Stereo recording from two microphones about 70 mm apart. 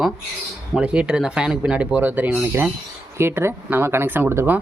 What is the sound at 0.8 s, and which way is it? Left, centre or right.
Speech, centre.